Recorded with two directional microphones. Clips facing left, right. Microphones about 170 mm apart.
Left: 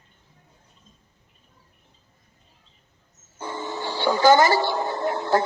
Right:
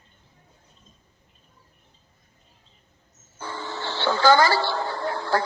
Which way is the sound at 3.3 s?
20° left (ahead or behind).